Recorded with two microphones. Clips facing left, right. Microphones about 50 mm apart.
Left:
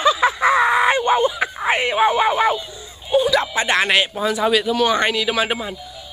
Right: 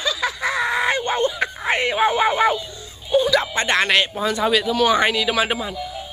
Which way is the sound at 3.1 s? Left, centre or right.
Centre.